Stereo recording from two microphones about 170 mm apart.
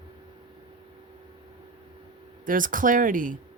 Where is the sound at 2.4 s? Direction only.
50° right (ahead or behind).